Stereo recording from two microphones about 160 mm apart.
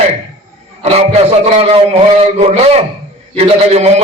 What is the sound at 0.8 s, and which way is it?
A man's voice, 40° right (ahead or behind).